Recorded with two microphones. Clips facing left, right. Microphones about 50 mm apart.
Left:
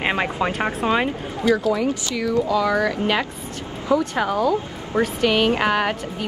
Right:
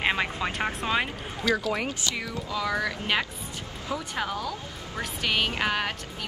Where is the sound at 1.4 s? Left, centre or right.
Left.